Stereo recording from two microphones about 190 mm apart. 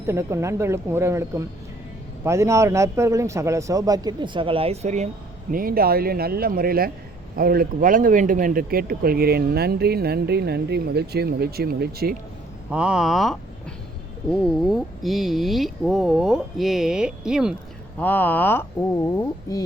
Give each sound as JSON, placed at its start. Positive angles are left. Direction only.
{"t": 0.0, "sound": "a man's voice", "side_deg": -15}
{"t": 5.5, "sound": "a man's voice", "side_deg": -50}
{"t": 12.7, "sound": "speech", "side_deg": -5}
{"t": 18.0, "sound": "speech", "side_deg": 10}
{"t": 19.1, "sound": "a sound", "side_deg": 20}